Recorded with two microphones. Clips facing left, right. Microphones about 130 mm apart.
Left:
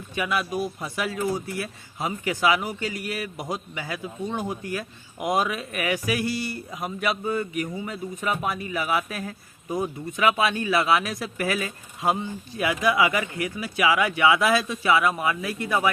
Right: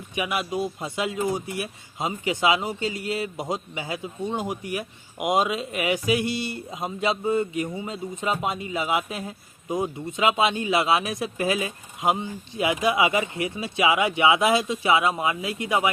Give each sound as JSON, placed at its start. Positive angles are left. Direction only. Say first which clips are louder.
{"t": 0.2, "sound": "a man's voice", "louder": "even", "side_deg": -20}